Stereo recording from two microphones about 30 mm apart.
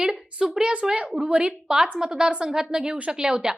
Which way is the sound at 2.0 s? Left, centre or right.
Right.